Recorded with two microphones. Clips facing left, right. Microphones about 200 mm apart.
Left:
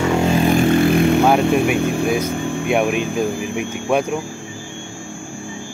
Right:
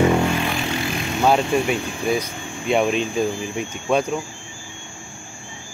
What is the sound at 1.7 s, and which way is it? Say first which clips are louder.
Speech: left 4 dB; 55° left (ahead or behind).